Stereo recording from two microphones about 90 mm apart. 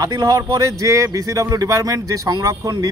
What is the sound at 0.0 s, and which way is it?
Speech, 45° right (ahead or behind).